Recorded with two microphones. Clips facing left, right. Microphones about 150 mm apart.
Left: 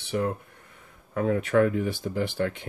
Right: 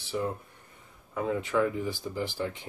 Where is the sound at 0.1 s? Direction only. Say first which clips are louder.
Left 4 dB; 70° left (ahead or behind).